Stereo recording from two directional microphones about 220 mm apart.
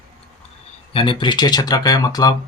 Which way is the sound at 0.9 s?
20° left (ahead or behind).